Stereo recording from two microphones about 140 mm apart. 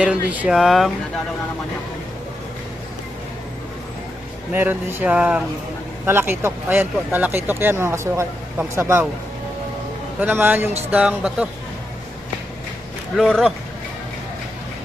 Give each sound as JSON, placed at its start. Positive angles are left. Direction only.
{"t": 0.0, "sound": "speech", "side_deg": -10}
{"t": 4.5, "sound": "speech", "side_deg": -15}
{"t": 10.2, "sound": "speech", "side_deg": -15}
{"t": 13.1, "sound": "speech", "side_deg": 0}